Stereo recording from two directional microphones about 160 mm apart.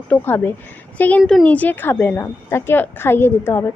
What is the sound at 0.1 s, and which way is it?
A woman's voice, 15° left (ahead or behind).